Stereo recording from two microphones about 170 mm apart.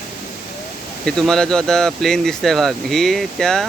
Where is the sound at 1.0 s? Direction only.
5° left (ahead or behind).